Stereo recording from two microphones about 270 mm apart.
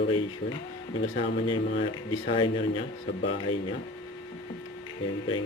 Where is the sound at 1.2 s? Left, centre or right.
Centre.